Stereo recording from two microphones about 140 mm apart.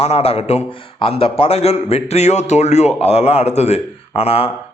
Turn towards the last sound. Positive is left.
turn(degrees=45)  # may be behind; listen again after turning